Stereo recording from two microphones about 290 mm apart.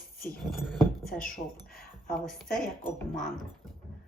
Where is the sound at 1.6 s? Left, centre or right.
Left.